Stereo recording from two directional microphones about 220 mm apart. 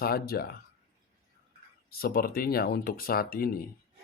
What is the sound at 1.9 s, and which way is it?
Speech, 45° left (ahead or behind).